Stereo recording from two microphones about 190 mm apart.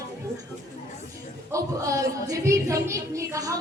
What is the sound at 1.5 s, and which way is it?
A woman's voice, 15° right (ahead or behind).